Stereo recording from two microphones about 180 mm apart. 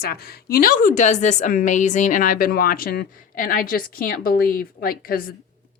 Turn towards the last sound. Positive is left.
turn(degrees=55)  # may be behind; listen again after turning